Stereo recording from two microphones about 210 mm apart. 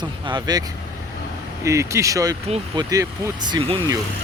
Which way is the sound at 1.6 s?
15° right (ahead or behind).